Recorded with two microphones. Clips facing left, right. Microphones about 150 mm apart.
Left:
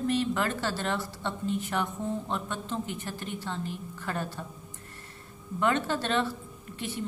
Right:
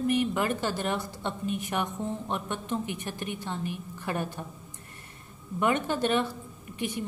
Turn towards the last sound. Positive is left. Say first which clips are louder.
# right 2 dB
turn(degrees=-15)  # may be behind; listen again after turning